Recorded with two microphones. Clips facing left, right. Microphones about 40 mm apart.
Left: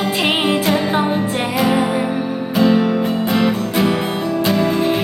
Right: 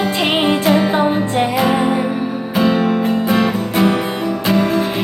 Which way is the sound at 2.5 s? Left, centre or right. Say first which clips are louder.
Left 1 dB; centre.